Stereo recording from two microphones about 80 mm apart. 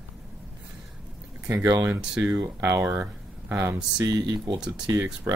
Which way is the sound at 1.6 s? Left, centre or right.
Right.